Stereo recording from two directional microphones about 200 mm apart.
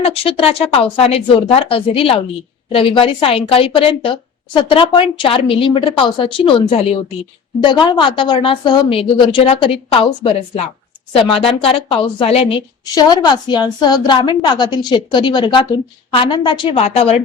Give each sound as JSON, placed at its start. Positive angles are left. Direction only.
{"t": 0.0, "sound": "a woman's voice", "side_deg": 25}